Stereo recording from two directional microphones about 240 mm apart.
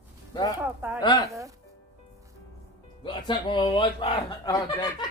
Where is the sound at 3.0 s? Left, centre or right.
Centre.